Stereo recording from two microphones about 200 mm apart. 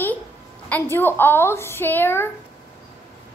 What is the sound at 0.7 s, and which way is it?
A woman's voice, 10° left (ahead or behind).